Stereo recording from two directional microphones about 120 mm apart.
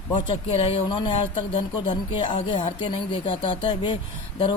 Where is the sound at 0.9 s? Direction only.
40° left (ahead or behind).